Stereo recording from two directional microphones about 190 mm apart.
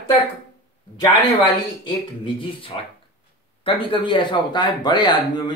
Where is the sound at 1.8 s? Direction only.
25° left (ahead or behind).